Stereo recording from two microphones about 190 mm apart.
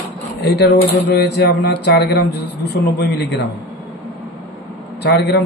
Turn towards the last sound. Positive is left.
turn(degrees=60)  # may be behind; listen again after turning